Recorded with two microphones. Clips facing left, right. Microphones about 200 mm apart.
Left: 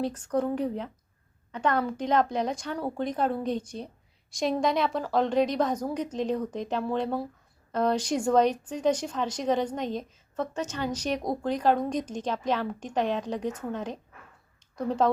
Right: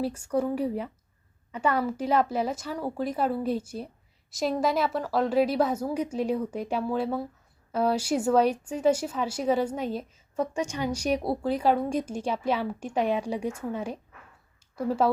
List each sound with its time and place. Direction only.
0.0 s speech: 10° right (ahead or behind)